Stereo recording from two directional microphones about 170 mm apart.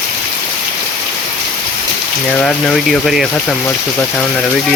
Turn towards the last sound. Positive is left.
turn(degrees=0)  # may be behind; listen again after turning